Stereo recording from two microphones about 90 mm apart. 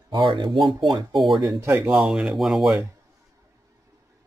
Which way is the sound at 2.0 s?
5° right (ahead or behind).